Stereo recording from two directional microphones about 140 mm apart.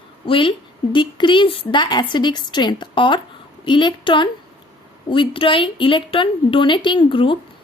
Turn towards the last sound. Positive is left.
turn(degrees=35)  # may be behind; listen again after turning